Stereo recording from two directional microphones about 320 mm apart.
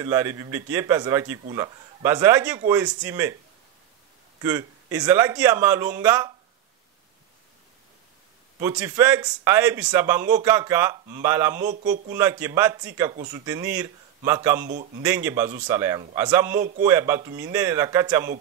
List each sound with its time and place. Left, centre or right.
0.0 s speech: centre
4.4 s speech: centre
8.5 s speech: centre
11.6 s speech: right
12.1 s speech: centre
13.1 s speech: centre
13.5 s speech: centre